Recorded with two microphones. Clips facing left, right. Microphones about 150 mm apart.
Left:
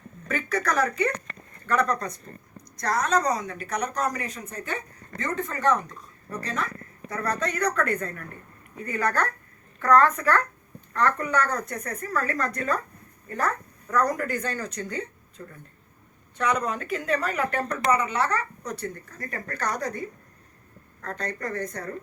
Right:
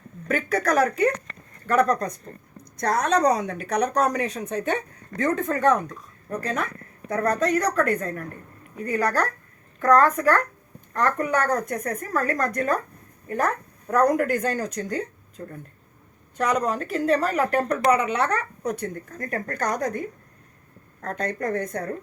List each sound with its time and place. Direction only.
0.3 s speech: 50° right (ahead or behind)
2.7 s a woman's voice: 60° right (ahead or behind)
5.2 s a woman's voice: 55° right (ahead or behind)
13.8 s a woman's voice: 55° right (ahead or behind)
17.9 s speech: 65° right (ahead or behind); by 19.9 s 50° right (ahead or behind)
21.0 s a woman's voice: 55° right (ahead or behind)